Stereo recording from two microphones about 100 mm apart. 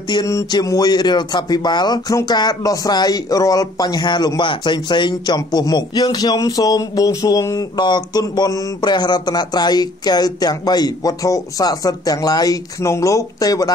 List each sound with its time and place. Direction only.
0.1 s speech: 35° left (ahead or behind)